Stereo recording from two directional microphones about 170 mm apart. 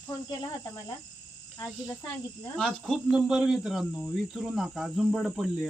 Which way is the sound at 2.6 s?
5° left (ahead or behind).